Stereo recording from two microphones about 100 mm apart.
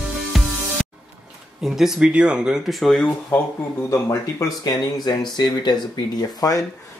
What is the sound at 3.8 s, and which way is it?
Speech, 30° left (ahead or behind).